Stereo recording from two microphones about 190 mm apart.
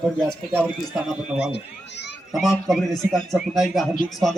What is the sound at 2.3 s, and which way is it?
Speech, centre (ahead or behind).